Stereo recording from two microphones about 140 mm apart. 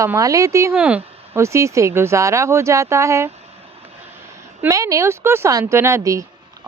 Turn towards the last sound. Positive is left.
turn(degrees=-20)  # may be behind; listen again after turning